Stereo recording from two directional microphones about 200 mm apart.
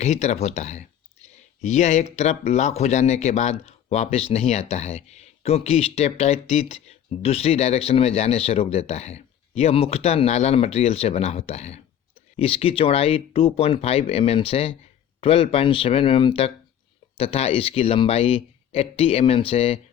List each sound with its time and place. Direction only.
0.0 s a man's voice: 35° left (ahead or behind)